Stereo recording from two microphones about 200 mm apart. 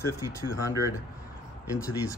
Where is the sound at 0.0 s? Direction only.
15° left (ahead or behind).